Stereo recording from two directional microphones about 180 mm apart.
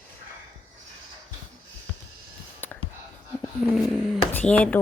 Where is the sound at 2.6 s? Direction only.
10° left (ahead or behind).